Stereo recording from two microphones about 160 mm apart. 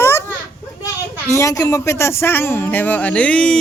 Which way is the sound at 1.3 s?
20° left (ahead or behind).